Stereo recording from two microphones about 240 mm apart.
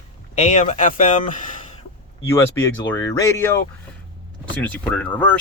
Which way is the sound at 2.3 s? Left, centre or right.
Centre.